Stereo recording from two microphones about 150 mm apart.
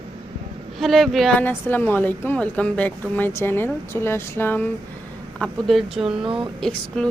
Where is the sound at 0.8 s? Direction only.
Centre (ahead or behind).